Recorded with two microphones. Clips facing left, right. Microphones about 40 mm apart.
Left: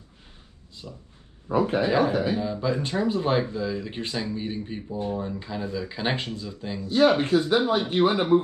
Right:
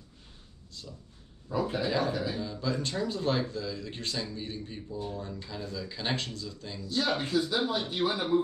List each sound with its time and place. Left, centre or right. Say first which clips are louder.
0.8 s speech: left 5 dB; left